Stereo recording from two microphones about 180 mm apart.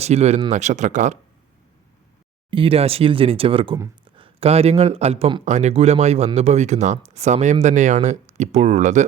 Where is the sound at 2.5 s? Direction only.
30° right (ahead or behind).